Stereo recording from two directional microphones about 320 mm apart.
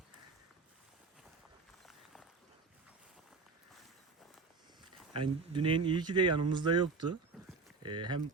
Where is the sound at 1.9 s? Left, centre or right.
Centre.